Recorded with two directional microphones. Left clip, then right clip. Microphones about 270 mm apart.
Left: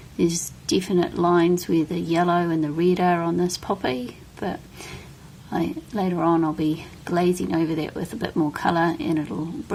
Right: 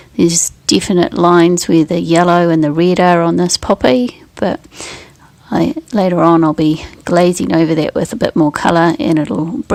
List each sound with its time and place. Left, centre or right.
0.2 s speech: right